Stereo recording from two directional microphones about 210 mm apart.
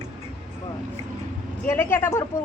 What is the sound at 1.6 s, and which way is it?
Speech, 10° left (ahead or behind).